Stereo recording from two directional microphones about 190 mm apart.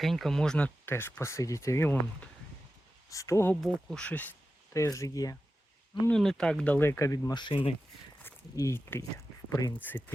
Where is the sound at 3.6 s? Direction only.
5° left (ahead or behind).